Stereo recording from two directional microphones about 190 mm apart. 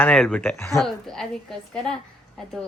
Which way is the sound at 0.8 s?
Centre (ahead or behind).